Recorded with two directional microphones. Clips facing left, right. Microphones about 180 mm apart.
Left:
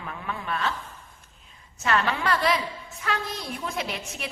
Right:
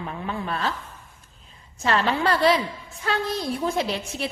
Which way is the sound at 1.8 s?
30° right (ahead or behind).